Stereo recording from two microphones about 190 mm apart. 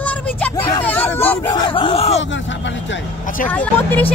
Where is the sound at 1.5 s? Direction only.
25° left (ahead or behind).